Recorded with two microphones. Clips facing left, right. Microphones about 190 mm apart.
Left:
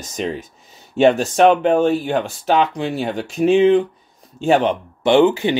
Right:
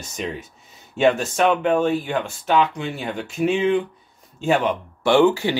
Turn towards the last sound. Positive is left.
turn(degrees=20)  # may be behind; listen again after turning